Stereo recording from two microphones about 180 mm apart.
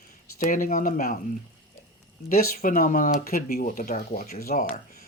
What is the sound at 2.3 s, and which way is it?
Speech, 55° left (ahead or behind).